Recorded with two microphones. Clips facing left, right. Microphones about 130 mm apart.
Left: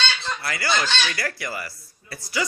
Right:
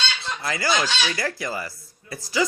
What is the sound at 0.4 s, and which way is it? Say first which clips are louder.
Speech: right 2 dB; 20° right (ahead or behind).